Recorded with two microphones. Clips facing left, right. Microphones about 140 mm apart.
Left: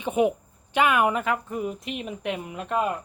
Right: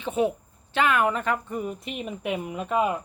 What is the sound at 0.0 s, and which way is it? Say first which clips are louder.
Speech: left 2 dB; 15° left (ahead or behind).